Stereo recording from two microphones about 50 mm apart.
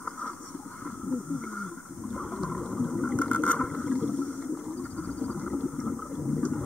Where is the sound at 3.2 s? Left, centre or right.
Left.